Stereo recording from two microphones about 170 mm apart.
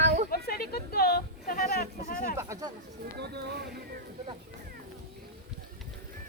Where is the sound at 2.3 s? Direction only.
20° right (ahead or behind).